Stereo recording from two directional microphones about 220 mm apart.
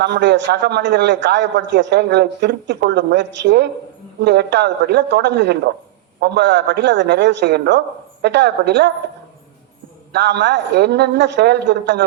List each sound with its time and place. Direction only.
0.0 s a man's voice: 50° right (ahead or behind)
10.1 s a man's voice: 50° right (ahead or behind)